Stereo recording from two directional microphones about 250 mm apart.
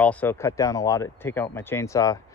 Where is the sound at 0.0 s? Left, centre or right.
Centre.